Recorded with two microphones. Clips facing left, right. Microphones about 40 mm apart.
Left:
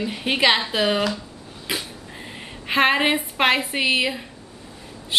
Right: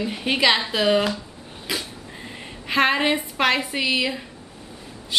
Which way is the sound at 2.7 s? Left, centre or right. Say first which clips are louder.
Left 1 dB; left.